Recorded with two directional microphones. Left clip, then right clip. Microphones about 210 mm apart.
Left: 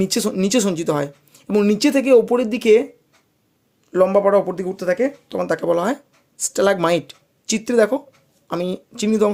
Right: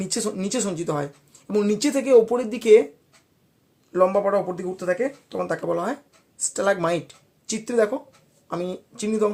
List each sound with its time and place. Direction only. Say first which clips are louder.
0.0 s speech: left 7 dB; 40° left (ahead or behind)
3.9 s speech: left 5 dB; 40° left (ahead or behind)